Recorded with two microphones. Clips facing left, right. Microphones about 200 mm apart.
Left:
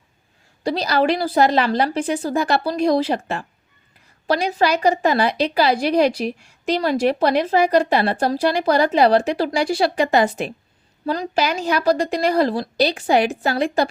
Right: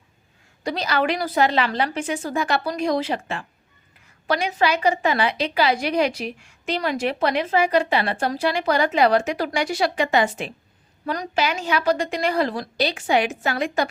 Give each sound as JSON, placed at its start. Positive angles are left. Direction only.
{"t": 0.6, "sound": "a woman's voice", "side_deg": 35}